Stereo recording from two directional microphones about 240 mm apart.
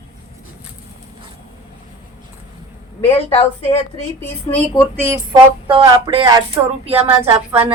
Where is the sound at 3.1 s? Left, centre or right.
Left.